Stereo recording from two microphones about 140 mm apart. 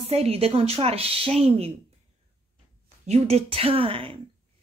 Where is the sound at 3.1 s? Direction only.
45° right (ahead or behind).